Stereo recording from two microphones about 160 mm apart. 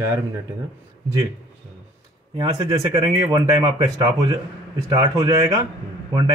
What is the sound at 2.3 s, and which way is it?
Speech, 25° right (ahead or behind).